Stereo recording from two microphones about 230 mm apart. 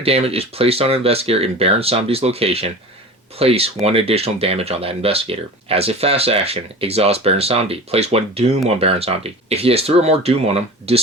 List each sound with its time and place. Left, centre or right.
0.0 s speech: right